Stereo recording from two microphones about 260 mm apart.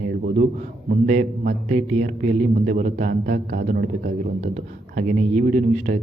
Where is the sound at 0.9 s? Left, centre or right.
Right.